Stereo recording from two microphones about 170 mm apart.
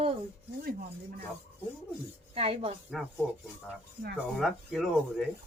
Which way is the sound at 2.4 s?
35° right (ahead or behind).